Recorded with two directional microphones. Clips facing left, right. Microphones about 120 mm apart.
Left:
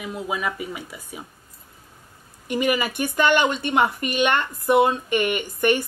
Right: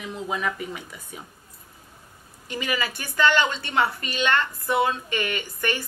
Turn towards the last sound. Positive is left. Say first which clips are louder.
# left 7 dB
turn(degrees=15)  # may be behind; listen again after turning